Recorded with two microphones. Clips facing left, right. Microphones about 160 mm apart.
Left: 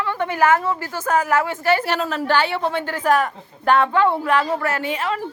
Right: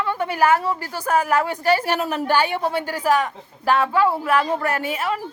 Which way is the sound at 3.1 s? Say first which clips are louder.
Left 1 dB; centre (ahead or behind).